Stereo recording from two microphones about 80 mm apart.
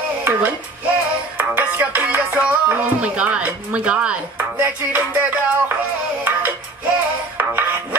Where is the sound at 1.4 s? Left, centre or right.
Centre.